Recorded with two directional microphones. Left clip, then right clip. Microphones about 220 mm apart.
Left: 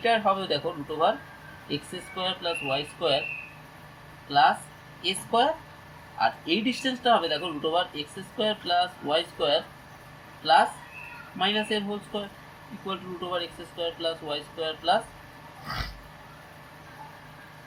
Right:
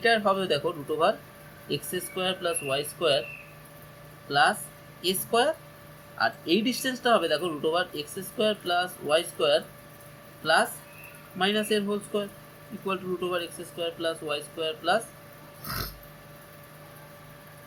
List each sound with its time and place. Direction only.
0.0 s speech: 30° right (ahead or behind)
2.1 s speech: 25° right (ahead or behind)
4.3 s speech: 30° right (ahead or behind)